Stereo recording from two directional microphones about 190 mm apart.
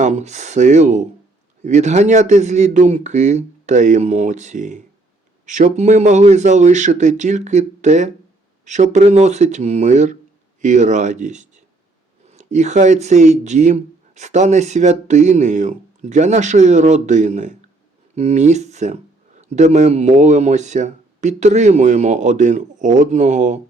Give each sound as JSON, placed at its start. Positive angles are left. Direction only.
{"t": 0.0, "sound": "speech", "side_deg": -40}